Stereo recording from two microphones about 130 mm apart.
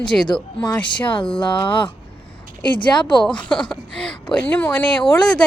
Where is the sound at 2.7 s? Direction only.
35° left (ahead or behind).